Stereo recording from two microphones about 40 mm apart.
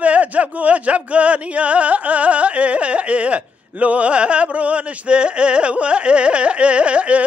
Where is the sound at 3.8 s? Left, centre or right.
Right.